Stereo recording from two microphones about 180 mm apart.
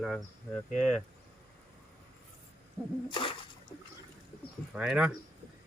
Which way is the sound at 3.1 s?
30° left (ahead or behind).